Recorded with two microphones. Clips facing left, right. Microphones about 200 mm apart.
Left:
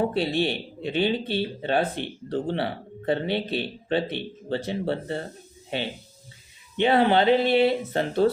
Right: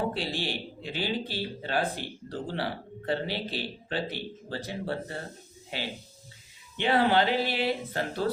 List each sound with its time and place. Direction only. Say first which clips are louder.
0.3 s a man's voice: left 8 dB; 60° left (ahead or behind)
0.8 s speech: left 8 dB; 25° left (ahead or behind)
6.7 s speech: left 4 dB; 20° left (ahead or behind)